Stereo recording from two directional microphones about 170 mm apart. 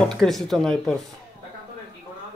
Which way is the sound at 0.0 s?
5° left (ahead or behind).